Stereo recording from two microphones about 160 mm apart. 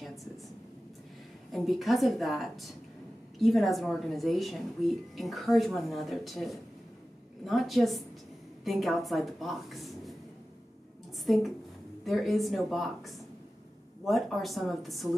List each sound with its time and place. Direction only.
1.5 s speech: centre (ahead or behind)
11.3 s speech: centre (ahead or behind)